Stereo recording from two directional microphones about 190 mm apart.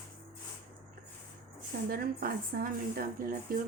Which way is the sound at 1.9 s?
50° right (ahead or behind).